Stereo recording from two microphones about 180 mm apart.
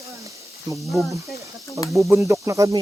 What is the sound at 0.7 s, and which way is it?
Speech, centre (ahead or behind).